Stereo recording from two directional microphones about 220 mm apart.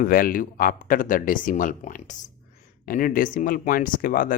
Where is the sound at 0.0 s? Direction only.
40° left (ahead or behind).